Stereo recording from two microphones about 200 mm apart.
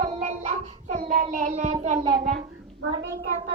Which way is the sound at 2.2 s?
40° right (ahead or behind).